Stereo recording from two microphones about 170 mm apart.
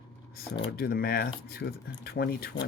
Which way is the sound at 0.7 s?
65° left (ahead or behind).